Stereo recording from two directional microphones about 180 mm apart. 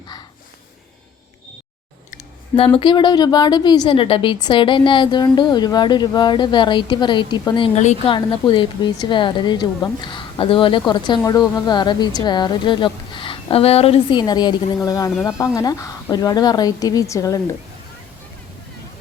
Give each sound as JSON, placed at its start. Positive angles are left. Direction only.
{"t": 2.7, "sound": "a woman's voice", "side_deg": 25}
{"t": 7.8, "sound": "a woman's voice", "side_deg": 40}
{"t": 8.1, "sound": "a woman's voice", "side_deg": 25}